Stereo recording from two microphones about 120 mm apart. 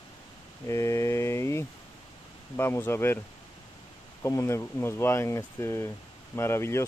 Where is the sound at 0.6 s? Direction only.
25° left (ahead or behind).